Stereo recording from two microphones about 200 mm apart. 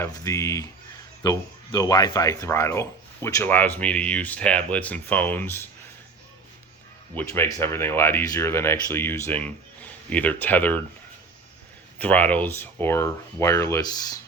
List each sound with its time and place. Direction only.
0.0 s speech: 15° left (ahead or behind)
7.2 s speech: 10° left (ahead or behind)
11.9 s speech: 10° left (ahead or behind)